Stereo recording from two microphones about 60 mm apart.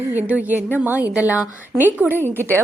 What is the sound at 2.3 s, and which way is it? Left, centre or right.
Speech, left.